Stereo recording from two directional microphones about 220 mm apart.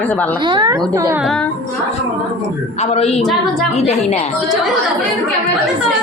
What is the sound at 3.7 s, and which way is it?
Speech, 30° left (ahead or behind).